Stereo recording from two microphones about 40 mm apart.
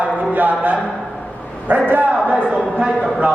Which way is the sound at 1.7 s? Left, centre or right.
Right.